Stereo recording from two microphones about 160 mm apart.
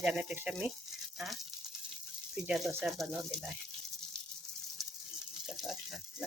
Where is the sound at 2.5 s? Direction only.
Centre (ahead or behind).